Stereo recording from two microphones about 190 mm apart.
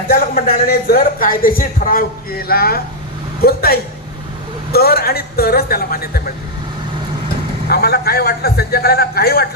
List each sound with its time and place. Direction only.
0.1 s speech: 55° left (ahead or behind)
7.7 s a man's voice: 55° left (ahead or behind)